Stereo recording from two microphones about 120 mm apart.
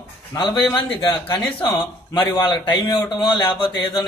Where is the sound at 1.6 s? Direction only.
40° left (ahead or behind).